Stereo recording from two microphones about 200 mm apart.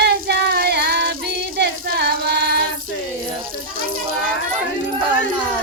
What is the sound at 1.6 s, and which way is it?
Child singing, 55° right (ahead or behind).